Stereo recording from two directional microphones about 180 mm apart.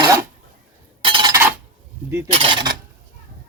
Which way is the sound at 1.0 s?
25° right (ahead or behind).